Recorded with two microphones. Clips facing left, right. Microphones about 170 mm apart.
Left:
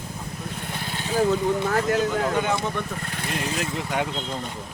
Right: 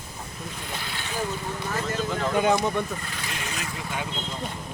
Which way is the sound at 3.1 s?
55° left (ahead or behind).